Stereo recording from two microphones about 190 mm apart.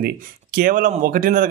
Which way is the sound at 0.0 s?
50° right (ahead or behind).